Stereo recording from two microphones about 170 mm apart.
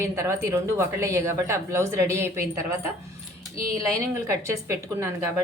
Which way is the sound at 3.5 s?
55° right (ahead or behind).